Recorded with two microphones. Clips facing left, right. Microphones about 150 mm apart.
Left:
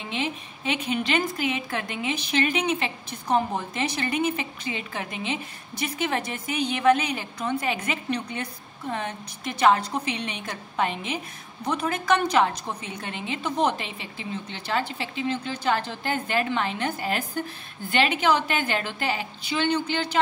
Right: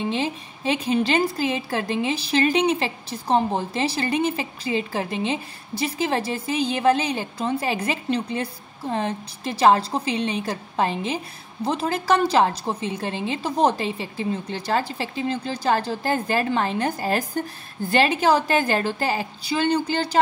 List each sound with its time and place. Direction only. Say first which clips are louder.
0.0 s a woman's voice: right 5 dB; 35° right (ahead or behind)